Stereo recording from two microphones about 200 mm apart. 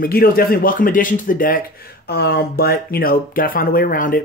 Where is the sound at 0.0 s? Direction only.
45° left (ahead or behind).